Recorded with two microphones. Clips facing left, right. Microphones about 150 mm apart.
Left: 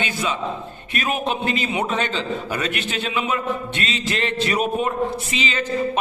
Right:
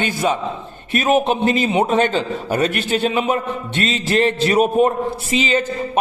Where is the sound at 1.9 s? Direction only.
50° right (ahead or behind).